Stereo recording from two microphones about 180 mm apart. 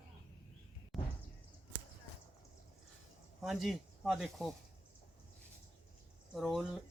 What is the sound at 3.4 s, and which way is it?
Speech, centre (ahead or behind).